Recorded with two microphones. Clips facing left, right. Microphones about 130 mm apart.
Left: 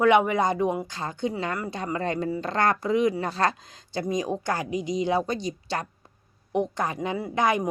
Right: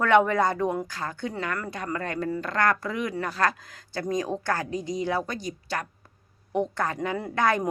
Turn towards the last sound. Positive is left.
turn(degrees=15)  # may be behind; listen again after turning